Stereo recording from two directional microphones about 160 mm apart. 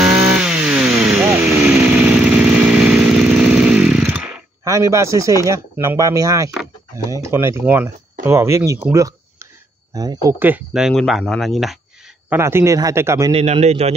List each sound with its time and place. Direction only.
0.0 s chainsaw: 5° right (ahead or behind)
4.6 s speech: 20° right (ahead or behind)
8.9 s a sound: 20° right (ahead or behind)
10.2 s speech: 10° right (ahead or behind)
12.3 s speech: 15° right (ahead or behind)
13.3 s a man's voice: 40° right (ahead or behind)